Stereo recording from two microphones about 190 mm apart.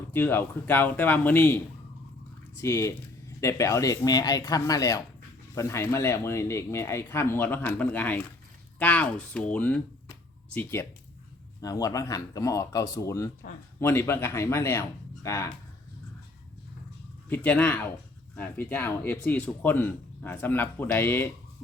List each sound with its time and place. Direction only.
0.1 s speech: 10° left (ahead or behind)
17.2 s speech: 10° left (ahead or behind)